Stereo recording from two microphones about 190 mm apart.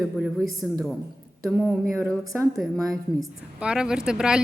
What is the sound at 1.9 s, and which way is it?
A woman's voice, 15° right (ahead or behind).